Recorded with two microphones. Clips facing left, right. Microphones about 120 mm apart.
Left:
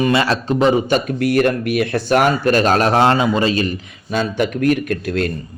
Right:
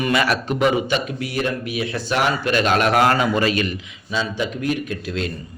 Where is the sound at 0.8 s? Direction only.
45° left (ahead or behind).